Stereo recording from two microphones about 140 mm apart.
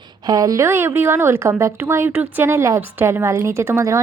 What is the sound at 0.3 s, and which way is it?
Speech, 25° right (ahead or behind).